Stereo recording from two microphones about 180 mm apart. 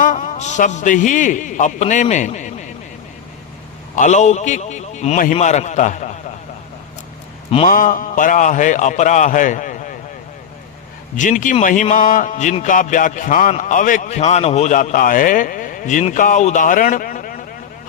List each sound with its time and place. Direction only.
0.0 s a man's voice: 45° left (ahead or behind)
3.9 s a man's voice: 40° left (ahead or behind)
7.7 s speech: 50° left (ahead or behind)
11.2 s speech: 45° left (ahead or behind)